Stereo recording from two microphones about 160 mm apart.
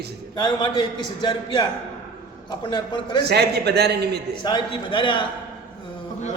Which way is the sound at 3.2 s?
90° right.